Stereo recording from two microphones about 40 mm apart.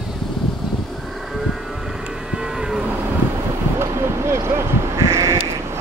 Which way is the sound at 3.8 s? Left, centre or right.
Right.